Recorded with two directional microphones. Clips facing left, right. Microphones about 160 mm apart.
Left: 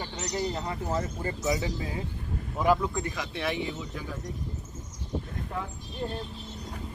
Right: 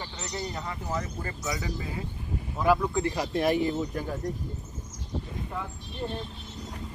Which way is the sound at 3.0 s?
35° right (ahead or behind).